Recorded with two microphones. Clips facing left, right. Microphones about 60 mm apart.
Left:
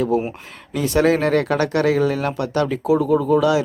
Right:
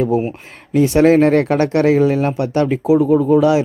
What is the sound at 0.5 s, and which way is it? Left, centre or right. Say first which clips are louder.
Speech: right 6 dB; right.